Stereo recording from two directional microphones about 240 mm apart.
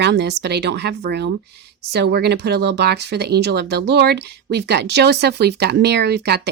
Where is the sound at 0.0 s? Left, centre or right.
Right.